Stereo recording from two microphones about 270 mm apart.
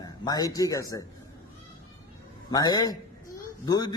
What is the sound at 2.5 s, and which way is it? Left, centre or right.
A man's voice, centre.